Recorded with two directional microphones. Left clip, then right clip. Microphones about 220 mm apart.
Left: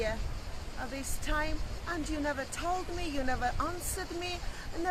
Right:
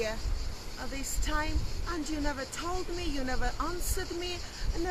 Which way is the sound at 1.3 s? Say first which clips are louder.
Even; centre (ahead or behind).